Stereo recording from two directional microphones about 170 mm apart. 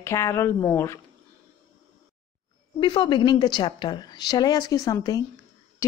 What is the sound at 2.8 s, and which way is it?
A woman's voice, 30° left (ahead or behind).